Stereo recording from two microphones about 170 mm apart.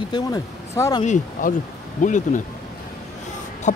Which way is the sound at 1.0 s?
50° left (ahead or behind).